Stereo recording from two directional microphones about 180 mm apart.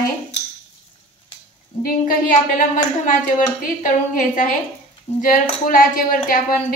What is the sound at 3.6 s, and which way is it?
A woman's voice, 45° left (ahead or behind).